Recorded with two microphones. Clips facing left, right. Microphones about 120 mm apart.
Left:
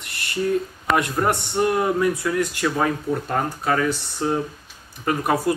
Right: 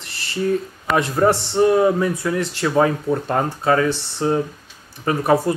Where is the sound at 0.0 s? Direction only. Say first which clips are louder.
Right 1 dB; 30° right (ahead or behind).